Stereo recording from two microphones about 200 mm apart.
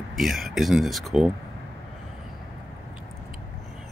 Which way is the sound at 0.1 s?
Centre (ahead or behind).